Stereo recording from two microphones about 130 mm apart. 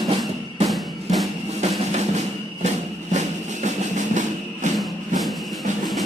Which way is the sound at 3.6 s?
65° right (ahead or behind).